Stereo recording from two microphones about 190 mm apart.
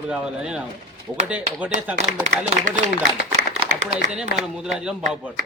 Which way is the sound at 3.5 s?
35° right (ahead or behind).